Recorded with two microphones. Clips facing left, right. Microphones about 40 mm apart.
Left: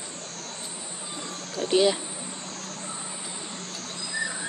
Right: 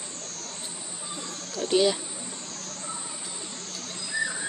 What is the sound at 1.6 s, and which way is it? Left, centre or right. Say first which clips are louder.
Speech: left 1 dB; centre.